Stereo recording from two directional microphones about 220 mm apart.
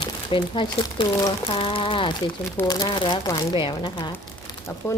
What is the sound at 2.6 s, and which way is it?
A woman's voice, 20° left (ahead or behind).